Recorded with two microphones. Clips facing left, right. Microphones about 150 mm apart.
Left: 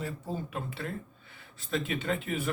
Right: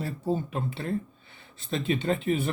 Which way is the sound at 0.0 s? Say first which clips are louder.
Right 7 dB; 30° right (ahead or behind).